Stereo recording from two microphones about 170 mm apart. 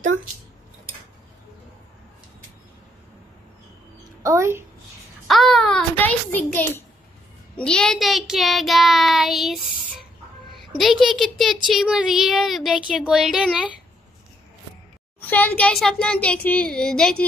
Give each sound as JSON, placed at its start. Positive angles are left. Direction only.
{"t": 4.2, "sound": "a woman's voice", "side_deg": -15}
{"t": 5.3, "sound": "a child's voice", "side_deg": 0}
{"t": 10.8, "sound": "speech", "side_deg": 0}
{"t": 15.1, "sound": "a child's voice", "side_deg": 10}